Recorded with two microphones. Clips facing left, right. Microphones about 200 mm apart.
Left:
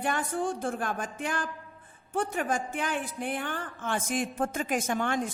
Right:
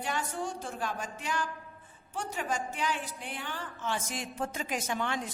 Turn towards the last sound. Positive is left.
turn(degrees=50)  # may be behind; listen again after turning